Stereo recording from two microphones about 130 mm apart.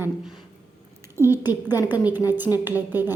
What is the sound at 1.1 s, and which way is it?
A woman's voice, 15° right (ahead or behind).